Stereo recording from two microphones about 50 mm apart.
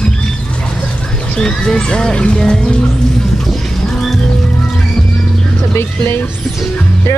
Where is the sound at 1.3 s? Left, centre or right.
Centre.